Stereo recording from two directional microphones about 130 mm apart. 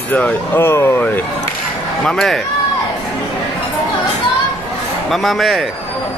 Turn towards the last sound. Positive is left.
turn(degrees=0)  # may be behind; listen again after turning